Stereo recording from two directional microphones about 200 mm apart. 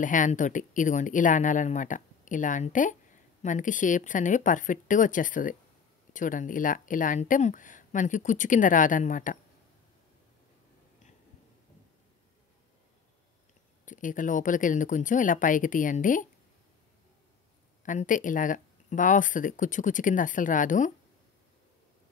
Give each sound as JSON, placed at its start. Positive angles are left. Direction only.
{"t": 0.0, "sound": "speech", "side_deg": 40}
{"t": 13.8, "sound": "speech", "side_deg": 40}
{"t": 17.8, "sound": "speech", "side_deg": 40}